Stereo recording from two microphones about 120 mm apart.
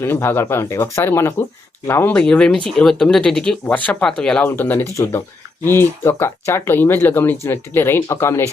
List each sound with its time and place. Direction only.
0.0 s speech: 20° left (ahead or behind)
2.1 s speech: 10° left (ahead or behind)